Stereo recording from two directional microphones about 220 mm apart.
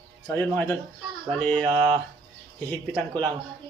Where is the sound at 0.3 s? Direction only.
5° left (ahead or behind).